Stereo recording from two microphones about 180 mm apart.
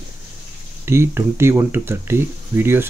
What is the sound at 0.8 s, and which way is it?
Speech, 15° right (ahead or behind).